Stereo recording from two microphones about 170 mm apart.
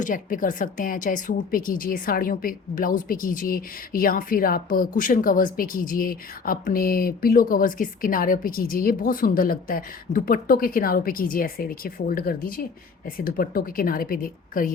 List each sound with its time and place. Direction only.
0.0 s a woman's voice: 50° left (ahead or behind)